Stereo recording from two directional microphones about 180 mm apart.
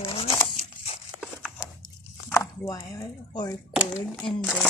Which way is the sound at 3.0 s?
25° left (ahead or behind).